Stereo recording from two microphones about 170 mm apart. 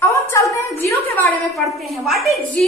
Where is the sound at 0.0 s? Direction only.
20° left (ahead or behind).